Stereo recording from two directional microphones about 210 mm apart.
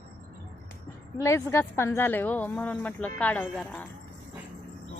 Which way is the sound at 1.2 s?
15° left (ahead or behind).